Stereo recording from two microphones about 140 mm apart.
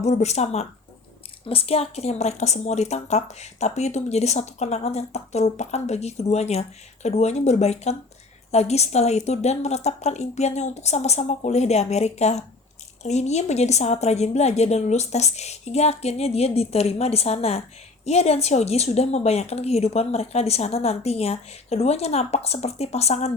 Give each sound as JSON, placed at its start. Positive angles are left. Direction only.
{"t": 0.0, "sound": "a woman's voice", "side_deg": 50}